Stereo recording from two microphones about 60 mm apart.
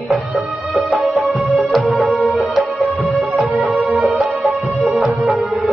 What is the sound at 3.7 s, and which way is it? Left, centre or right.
Music, right.